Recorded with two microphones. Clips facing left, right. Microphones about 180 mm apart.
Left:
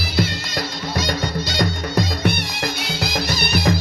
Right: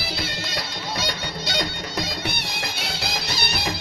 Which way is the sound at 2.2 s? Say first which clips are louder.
Left 9 dB; 60° left (ahead or behind).